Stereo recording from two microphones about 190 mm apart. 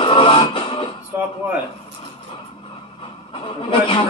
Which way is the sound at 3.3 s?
25° left (ahead or behind).